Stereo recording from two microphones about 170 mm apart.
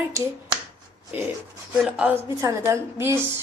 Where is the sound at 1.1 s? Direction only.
10° right (ahead or behind).